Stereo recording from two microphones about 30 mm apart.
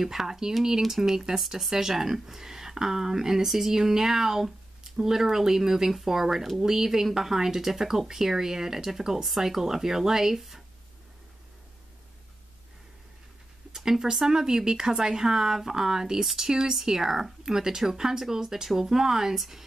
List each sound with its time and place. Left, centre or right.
0.0 s speech: centre
13.7 s a sound: centre
14.3 s speech: right